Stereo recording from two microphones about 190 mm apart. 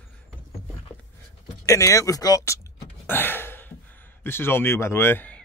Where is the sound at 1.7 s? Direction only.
15° left (ahead or behind).